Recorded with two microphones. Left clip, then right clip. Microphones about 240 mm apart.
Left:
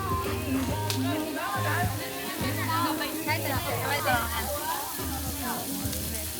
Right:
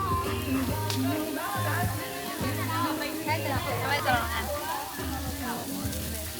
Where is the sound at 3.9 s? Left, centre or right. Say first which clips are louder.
Even; centre.